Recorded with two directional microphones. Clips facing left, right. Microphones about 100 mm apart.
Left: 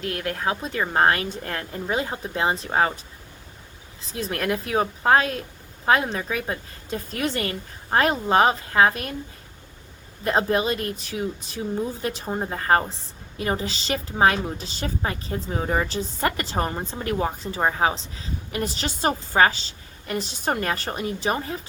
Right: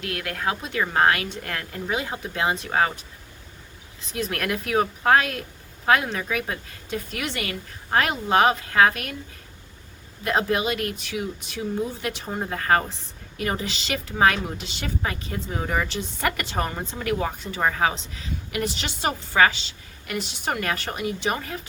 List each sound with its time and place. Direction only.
0.0 s a woman's voice: 30° left (ahead or behind)
2.6 s a woman's voice: 15° left (ahead or behind)
4.1 s a woman's voice: 30° left (ahead or behind)
10.2 s a woman's voice: 30° left (ahead or behind)
12.2 s a woman's voice: 15° left (ahead or behind)
12.5 s a woman's voice: 25° left (ahead or behind)
15.9 s a woman's voice: 35° left (ahead or behind)
17.6 s speech: 20° left (ahead or behind)
17.9 s a woman's voice: 35° left (ahead or behind)